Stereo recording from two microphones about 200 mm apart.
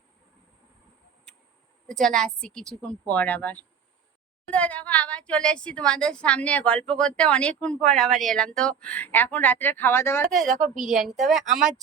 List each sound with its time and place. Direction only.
1.9 s speech: 5° left (ahead or behind)
10.5 s a woman's voice: 40° right (ahead or behind)
11.2 s speech: centre (ahead or behind)